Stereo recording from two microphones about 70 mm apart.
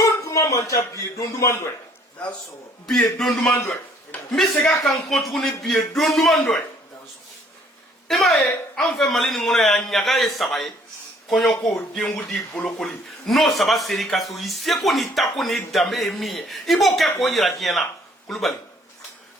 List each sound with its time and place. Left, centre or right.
0.3 s a sound: left
0.9 s a man's voice: left
2.8 s a man's voice: centre
8.0 s a man's voice: centre